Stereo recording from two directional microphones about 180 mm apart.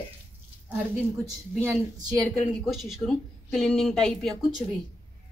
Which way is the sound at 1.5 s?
10° right (ahead or behind).